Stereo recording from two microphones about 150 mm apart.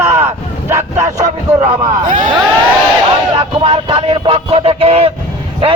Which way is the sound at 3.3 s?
40° right (ahead or behind).